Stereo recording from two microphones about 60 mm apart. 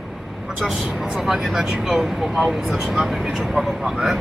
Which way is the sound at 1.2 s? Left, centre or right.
Centre.